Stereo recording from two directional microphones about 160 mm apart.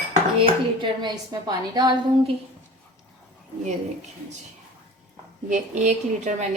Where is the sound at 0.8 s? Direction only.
25° right (ahead or behind).